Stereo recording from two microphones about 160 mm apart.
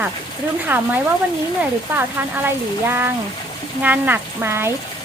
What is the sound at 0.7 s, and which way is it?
Speech, 15° right (ahead or behind).